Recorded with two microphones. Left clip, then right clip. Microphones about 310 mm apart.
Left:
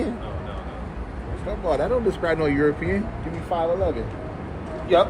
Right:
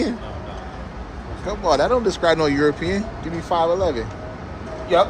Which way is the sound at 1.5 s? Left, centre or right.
Centre.